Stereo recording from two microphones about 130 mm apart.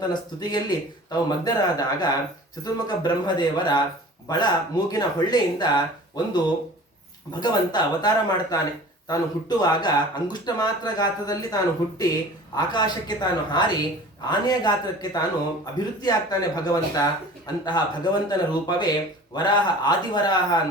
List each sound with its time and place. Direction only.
0.1 s speech: 35° left (ahead or behind)